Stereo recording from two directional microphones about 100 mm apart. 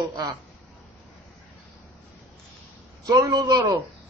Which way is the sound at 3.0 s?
40° right (ahead or behind).